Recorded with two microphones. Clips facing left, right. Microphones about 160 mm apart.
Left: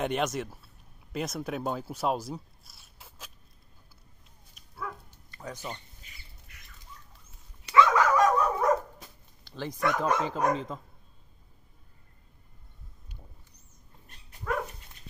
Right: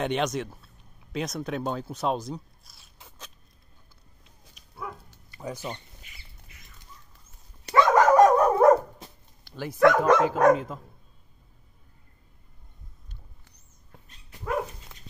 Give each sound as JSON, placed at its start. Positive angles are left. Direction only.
{"t": 0.0, "sound": "speech", "side_deg": 5}
{"t": 4.7, "sound": "bow-wow", "side_deg": -15}
{"t": 7.6, "sound": "dog", "side_deg": -45}
{"t": 9.4, "sound": "bow-wow", "side_deg": -10}
{"t": 9.8, "sound": "speech", "side_deg": -90}